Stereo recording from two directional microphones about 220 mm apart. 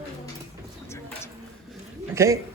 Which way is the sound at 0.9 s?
10° left (ahead or behind).